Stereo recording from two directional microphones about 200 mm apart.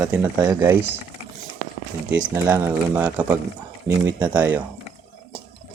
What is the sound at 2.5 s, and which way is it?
Speech, 10° right (ahead or behind).